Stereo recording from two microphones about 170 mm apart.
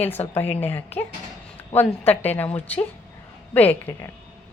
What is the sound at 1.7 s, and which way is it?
Speech, 10° left (ahead or behind).